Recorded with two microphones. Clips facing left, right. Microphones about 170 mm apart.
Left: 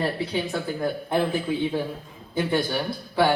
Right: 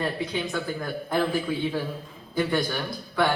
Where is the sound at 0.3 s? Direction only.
30° left (ahead or behind).